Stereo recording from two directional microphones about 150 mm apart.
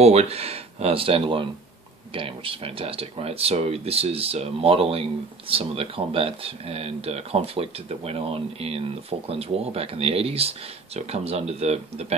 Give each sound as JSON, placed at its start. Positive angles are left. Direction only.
{"t": 0.0, "sound": "speech", "side_deg": -45}